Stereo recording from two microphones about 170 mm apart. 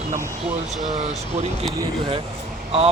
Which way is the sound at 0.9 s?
40° right (ahead or behind).